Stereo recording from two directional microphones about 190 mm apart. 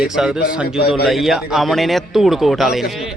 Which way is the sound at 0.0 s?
Centre (ahead or behind).